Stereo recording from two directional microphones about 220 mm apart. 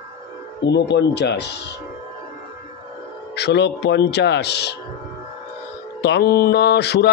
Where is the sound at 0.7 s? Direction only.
50° left (ahead or behind).